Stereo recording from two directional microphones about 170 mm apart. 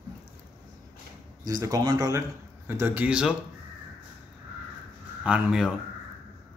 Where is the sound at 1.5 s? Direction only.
20° right (ahead or behind); by 3.3 s 5° right (ahead or behind).